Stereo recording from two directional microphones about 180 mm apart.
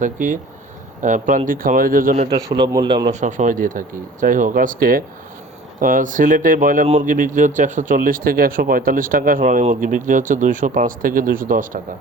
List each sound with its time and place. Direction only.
0.0 s speech: 45° right (ahead or behind)
2.3 s speech: 20° right (ahead or behind)
3.1 s speech: 45° right (ahead or behind)